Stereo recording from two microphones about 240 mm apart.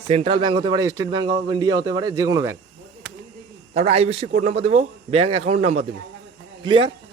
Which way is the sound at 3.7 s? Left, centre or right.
Right.